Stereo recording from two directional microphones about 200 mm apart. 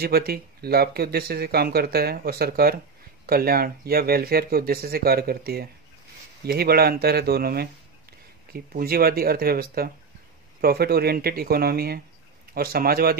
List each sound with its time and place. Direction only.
0.0 s speech: 50° right (ahead or behind)